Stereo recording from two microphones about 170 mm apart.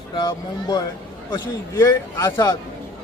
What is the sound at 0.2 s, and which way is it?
Speech, 25° left (ahead or behind).